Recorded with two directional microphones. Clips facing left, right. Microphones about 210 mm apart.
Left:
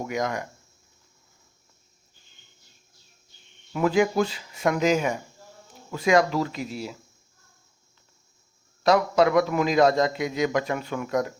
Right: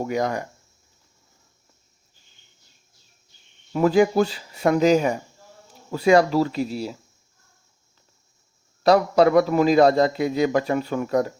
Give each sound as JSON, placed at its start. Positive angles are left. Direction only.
{"t": 0.0, "sound": "speech", "side_deg": -35}
{"t": 3.7, "sound": "a man's voice", "side_deg": -35}
{"t": 8.8, "sound": "a man's voice", "side_deg": -35}